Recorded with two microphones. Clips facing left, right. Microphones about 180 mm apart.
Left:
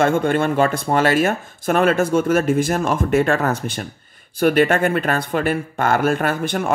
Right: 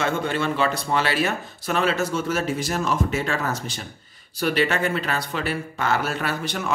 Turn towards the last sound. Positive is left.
turn(degrees=50)  # may be behind; listen again after turning